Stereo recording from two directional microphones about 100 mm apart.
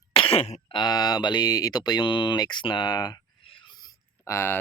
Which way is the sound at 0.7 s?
45° left (ahead or behind).